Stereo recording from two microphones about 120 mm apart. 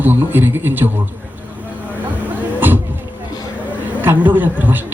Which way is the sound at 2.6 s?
15° right (ahead or behind).